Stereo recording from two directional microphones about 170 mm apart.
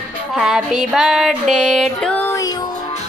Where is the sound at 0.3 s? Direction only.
Centre (ahead or behind); by 2.6 s 20° left (ahead or behind).